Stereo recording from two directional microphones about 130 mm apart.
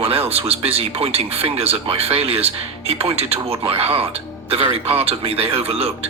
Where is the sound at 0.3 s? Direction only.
50° right (ahead or behind).